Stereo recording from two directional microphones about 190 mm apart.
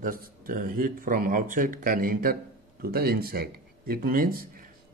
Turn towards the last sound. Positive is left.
turn(degrees=-50)  # may be behind; listen again after turning